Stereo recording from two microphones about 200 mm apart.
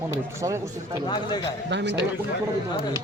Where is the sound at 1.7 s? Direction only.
60° right (ahead or behind).